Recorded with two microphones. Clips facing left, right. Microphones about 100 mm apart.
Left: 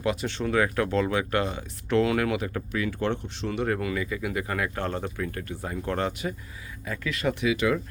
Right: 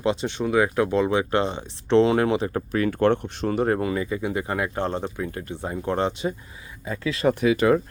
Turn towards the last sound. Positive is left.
turn(degrees=-40)  # may be behind; listen again after turning